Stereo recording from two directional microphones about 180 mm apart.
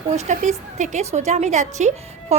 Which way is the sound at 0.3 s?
40° right (ahead or behind).